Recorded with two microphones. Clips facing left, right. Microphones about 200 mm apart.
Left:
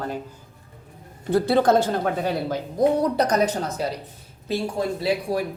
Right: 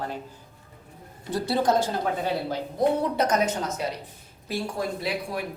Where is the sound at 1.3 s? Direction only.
60° left (ahead or behind); by 3.8 s 35° left (ahead or behind).